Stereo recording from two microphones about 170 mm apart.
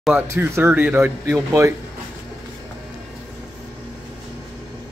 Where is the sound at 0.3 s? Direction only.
15° right (ahead or behind).